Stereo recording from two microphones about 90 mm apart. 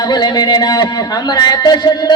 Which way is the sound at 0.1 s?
50° left (ahead or behind).